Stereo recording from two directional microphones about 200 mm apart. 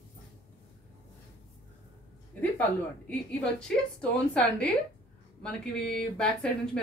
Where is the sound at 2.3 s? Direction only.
10° left (ahead or behind).